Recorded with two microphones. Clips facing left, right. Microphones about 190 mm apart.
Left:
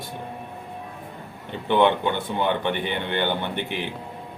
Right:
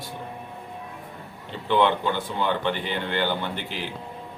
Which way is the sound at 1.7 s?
20° left (ahead or behind).